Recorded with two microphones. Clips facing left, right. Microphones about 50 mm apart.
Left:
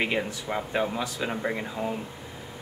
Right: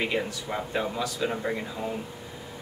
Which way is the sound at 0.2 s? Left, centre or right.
Centre.